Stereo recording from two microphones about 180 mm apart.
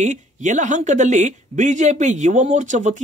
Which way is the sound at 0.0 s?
40° right (ahead or behind).